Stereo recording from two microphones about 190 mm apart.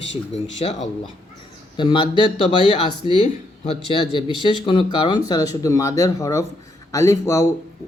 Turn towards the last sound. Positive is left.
turn(degrees=15)  # may be behind; listen again after turning